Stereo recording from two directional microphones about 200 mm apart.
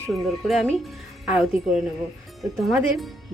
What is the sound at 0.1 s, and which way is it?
Speech, centre (ahead or behind).